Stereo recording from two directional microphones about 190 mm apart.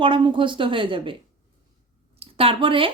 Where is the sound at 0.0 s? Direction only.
25° right (ahead or behind).